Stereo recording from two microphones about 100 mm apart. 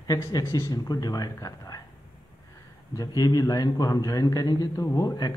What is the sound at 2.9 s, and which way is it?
Speech, 40° left (ahead or behind).